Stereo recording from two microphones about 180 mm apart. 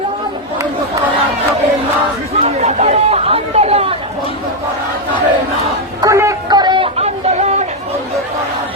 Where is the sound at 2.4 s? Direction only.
35° right (ahead or behind).